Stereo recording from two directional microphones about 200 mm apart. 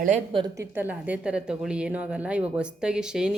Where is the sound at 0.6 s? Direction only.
10° right (ahead or behind).